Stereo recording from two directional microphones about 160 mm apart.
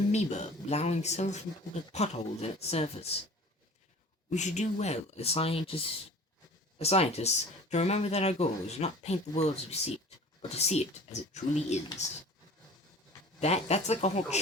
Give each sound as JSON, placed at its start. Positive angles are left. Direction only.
{"t": 0.1, "sound": "speech", "side_deg": 45}
{"t": 4.3, "sound": "speech", "side_deg": 45}
{"t": 13.4, "sound": "speech", "side_deg": 45}